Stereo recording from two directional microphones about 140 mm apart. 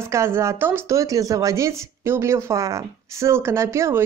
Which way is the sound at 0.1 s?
20° right (ahead or behind).